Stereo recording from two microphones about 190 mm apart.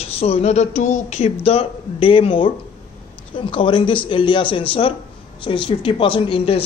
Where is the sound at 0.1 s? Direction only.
30° left (ahead or behind).